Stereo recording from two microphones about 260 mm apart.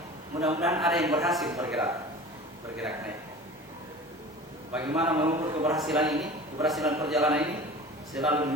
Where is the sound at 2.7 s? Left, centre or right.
Centre.